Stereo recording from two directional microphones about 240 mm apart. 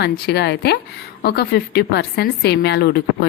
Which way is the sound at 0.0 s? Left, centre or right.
Left.